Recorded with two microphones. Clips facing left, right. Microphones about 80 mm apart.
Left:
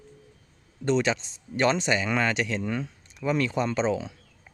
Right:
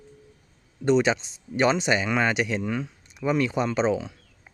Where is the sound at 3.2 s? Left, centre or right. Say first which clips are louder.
Right 2 dB; centre.